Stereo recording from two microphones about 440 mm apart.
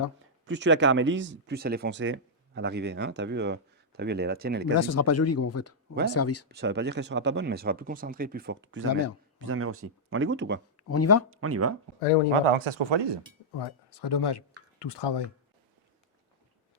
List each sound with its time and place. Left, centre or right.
0.4 s speech: right
4.8 s speech: left
6.5 s speech: right
10.8 s speech: left
11.3 s speech: right
12.3 s speech: right
13.6 s speech: left